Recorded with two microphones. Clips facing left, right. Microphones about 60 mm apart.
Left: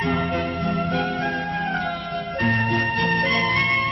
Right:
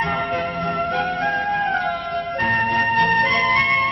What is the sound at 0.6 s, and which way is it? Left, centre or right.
Music, right.